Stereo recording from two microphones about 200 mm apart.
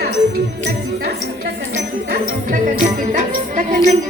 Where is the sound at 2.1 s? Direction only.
40° right (ahead or behind).